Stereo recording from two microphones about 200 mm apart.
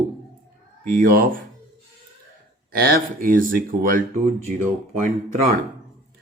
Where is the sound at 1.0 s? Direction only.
45° right (ahead or behind).